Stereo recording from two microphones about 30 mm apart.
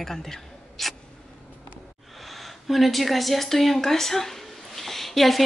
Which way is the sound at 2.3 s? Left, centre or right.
Centre.